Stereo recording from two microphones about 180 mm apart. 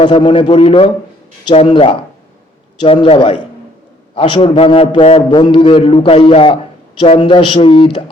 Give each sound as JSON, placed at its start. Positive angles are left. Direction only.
{"t": 0.0, "sound": "a man's voice", "side_deg": 25}